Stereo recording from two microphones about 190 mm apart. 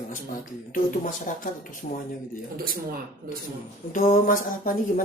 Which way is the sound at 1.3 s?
40° left (ahead or behind).